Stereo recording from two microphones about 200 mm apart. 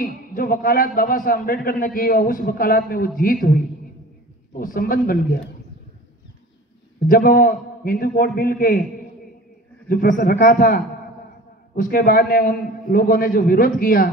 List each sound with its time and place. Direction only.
0.0 s a man's voice: 45° left (ahead or behind)
7.1 s a man's voice: 45° left (ahead or behind)
9.8 s a man's voice: 45° left (ahead or behind)